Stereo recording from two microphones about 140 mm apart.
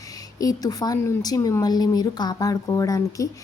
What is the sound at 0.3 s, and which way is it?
A woman's voice, 25° left (ahead or behind).